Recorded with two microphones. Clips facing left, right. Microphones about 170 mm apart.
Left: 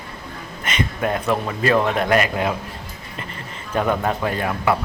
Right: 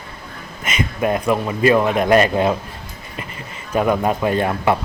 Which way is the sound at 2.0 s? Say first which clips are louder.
Right 5 dB; 30° right (ahead or behind).